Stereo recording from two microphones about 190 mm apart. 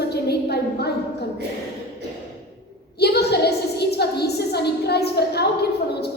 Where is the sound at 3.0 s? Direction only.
60° left (ahead or behind).